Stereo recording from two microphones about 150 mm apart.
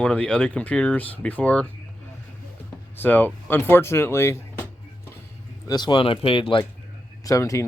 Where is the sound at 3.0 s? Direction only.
10° left (ahead or behind).